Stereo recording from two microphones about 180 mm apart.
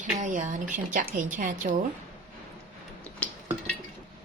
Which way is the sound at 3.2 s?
5° left (ahead or behind).